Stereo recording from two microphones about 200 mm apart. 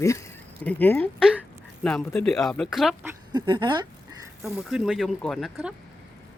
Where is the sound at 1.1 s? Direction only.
5° right (ahead or behind).